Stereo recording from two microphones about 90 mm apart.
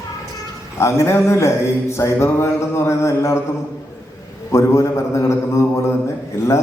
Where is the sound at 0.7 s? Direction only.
35° left (ahead or behind).